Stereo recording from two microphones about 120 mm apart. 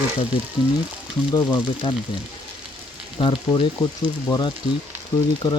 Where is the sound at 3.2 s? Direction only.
45° left (ahead or behind).